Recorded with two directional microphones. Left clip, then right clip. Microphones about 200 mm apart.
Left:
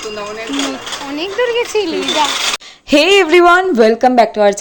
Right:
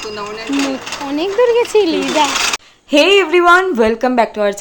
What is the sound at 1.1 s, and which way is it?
Speech, 35° right (ahead or behind).